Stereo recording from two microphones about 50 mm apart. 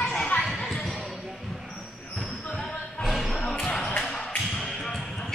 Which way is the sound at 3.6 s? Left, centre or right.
Centre.